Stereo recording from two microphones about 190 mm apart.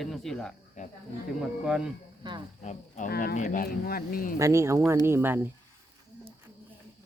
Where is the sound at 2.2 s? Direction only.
25° right (ahead or behind).